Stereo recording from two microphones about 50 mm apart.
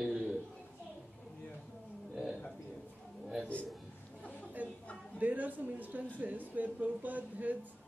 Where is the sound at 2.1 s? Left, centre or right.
Centre.